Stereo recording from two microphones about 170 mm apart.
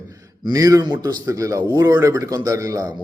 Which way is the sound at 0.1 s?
20° right (ahead or behind).